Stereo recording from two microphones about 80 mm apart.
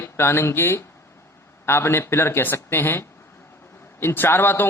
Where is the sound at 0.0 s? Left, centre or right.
Left.